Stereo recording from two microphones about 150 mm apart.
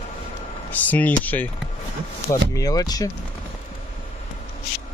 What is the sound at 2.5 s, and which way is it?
Speech, 25° left (ahead or behind).